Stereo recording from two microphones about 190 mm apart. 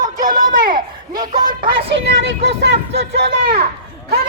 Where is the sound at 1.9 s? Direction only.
65° right (ahead or behind).